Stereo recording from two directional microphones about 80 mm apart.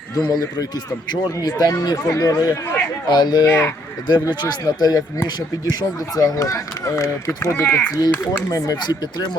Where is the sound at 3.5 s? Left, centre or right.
Left.